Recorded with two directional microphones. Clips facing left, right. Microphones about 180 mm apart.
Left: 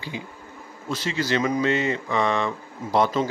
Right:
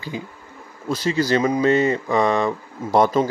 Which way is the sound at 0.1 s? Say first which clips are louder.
Right 3 dB; 40° right (ahead or behind).